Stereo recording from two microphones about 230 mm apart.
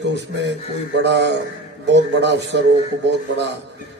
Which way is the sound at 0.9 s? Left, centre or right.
Right.